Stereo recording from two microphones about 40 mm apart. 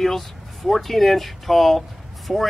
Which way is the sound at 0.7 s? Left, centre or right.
Centre.